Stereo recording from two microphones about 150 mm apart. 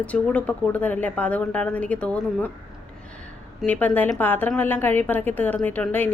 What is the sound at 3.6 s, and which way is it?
A woman's voice, 10° left (ahead or behind).